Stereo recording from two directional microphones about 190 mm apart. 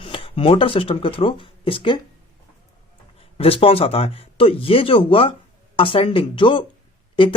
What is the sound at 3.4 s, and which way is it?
Speech, 30° left (ahead or behind).